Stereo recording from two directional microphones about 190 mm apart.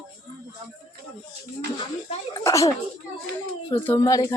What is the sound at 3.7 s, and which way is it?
Speech, 15° left (ahead or behind).